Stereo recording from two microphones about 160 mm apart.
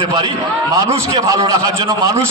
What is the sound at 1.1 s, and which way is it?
Speech, 20° right (ahead or behind).